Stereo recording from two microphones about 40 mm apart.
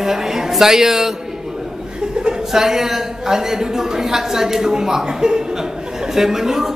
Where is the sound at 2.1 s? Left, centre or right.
Right.